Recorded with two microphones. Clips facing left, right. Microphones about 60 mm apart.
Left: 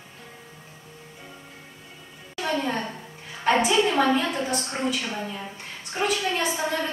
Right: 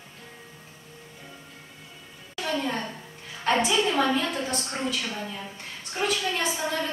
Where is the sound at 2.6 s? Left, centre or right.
Centre.